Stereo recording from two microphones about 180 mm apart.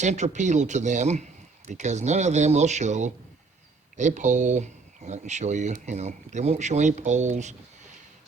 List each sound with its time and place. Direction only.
0.0 s speech: 40° right (ahead or behind)